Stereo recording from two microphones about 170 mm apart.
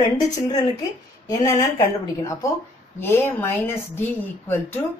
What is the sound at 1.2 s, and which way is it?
Speech, 20° left (ahead or behind).